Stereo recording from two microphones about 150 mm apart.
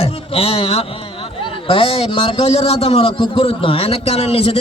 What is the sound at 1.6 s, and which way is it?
A man's voice, 40° left (ahead or behind).